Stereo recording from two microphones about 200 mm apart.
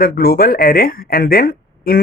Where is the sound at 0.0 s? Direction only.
50° left (ahead or behind).